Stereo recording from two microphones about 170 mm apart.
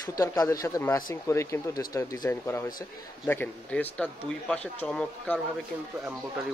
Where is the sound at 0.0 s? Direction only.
20° left (ahead or behind).